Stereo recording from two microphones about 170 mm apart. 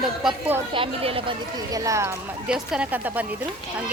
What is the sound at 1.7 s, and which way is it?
Speech, 20° right (ahead or behind).